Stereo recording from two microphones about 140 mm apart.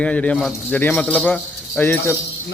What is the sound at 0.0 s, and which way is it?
Speech, 10° left (ahead or behind).